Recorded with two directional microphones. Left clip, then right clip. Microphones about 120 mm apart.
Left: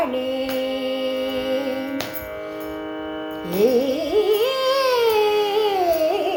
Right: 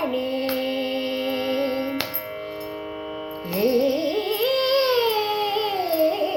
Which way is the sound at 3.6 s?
20° left (ahead or behind).